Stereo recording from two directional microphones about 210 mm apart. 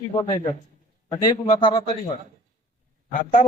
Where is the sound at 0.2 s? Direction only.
20° left (ahead or behind).